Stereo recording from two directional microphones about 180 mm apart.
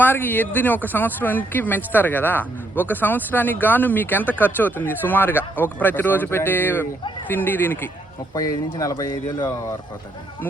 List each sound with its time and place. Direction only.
0.0 s speech: 10° left (ahead or behind)